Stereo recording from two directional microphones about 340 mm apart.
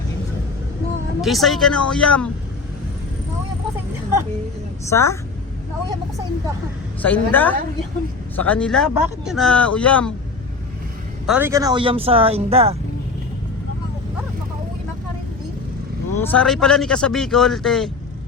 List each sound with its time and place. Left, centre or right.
1.2 s speech: centre
4.9 s a woman's voice: centre
7.0 s speech: centre
11.3 s speech: centre
16.2 s speech: centre